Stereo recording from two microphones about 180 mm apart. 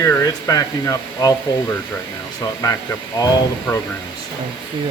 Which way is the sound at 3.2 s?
20° left (ahead or behind).